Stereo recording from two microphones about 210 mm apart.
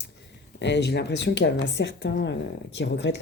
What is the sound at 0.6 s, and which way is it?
Speech, 55° left (ahead or behind).